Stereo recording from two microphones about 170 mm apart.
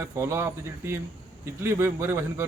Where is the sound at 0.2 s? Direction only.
15° right (ahead or behind).